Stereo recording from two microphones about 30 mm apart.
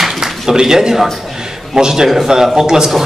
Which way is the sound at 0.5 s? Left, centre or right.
Right.